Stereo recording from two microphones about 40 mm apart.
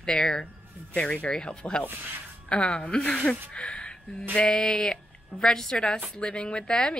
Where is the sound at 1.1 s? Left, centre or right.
Left.